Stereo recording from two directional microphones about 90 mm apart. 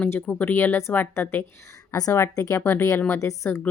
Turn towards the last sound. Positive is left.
turn(degrees=30)  # may be behind; listen again after turning